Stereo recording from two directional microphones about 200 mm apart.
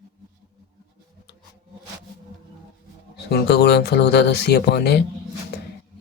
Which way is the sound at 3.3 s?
55° left (ahead or behind).